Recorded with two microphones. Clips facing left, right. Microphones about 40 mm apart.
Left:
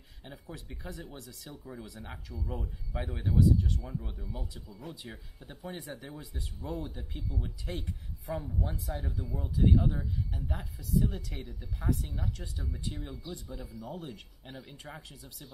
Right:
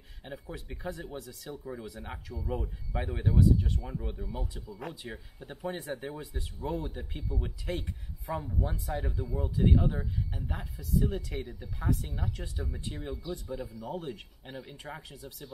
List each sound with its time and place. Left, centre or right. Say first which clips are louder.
0.2 s speech: right 4 dB; centre
5.9 s speech: right 6 dB; right
6.3 s speech: right 2 dB; centre
7.6 s speech: right 3 dB; centre
8.8 s speech: right 3 dB; right
10.6 s speech: even; centre